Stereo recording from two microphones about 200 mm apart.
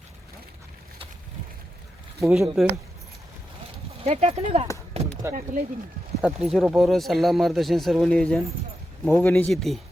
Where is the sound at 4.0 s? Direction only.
30° right (ahead or behind).